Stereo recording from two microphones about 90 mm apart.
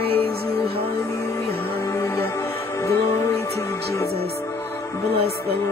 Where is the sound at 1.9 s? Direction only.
30° left (ahead or behind).